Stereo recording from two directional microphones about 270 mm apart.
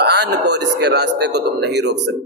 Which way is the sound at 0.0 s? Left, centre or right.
Right.